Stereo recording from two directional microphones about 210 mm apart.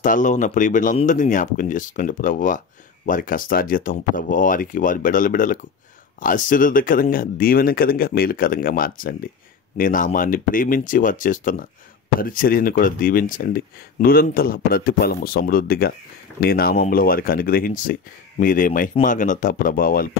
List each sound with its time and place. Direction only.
0.0 s speech: 40° left (ahead or behind)